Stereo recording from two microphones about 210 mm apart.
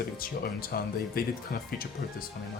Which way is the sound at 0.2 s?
45° left (ahead or behind).